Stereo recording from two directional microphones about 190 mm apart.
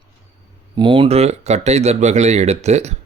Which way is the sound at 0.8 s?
25° right (ahead or behind).